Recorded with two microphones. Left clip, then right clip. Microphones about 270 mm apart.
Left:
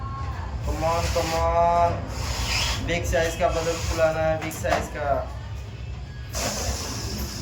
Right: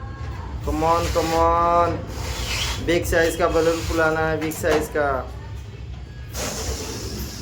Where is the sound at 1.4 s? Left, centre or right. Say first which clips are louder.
Right 1 dB; centre.